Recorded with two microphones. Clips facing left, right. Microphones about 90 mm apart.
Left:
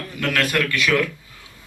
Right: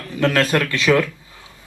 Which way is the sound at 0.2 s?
25° right (ahead or behind).